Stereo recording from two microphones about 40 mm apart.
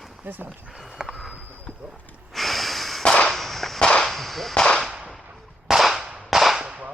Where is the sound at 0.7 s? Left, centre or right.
Centre.